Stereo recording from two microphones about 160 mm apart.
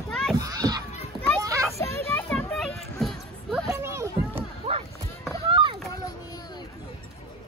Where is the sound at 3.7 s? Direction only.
15° right (ahead or behind).